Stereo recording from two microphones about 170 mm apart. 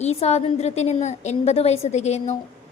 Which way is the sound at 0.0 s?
40° left (ahead or behind).